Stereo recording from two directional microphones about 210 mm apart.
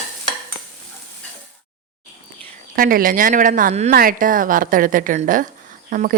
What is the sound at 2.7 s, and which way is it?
Speech, 40° right (ahead or behind).